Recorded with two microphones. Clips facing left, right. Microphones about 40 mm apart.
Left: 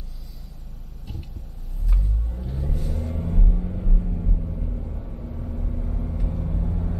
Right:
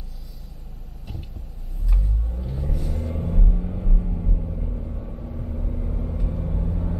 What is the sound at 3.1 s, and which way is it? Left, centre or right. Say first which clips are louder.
Rumble: right 1 dB; centre.